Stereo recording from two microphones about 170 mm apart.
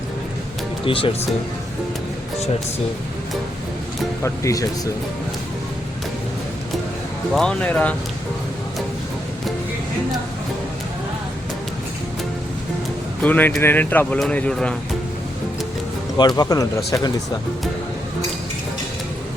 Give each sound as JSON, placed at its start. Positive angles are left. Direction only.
{"t": 0.9, "sound": "speech", "side_deg": 30}
{"t": 4.2, "sound": "speech", "side_deg": 20}
{"t": 7.3, "sound": "speech", "side_deg": 5}
{"t": 13.2, "sound": "speech", "side_deg": 10}
{"t": 16.1, "sound": "speech", "side_deg": 25}